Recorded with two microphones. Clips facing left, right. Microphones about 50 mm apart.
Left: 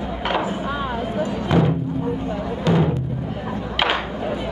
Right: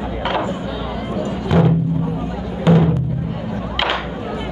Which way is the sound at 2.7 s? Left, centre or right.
Centre.